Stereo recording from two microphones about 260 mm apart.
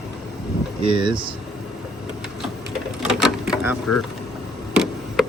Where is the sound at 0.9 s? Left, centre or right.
Centre.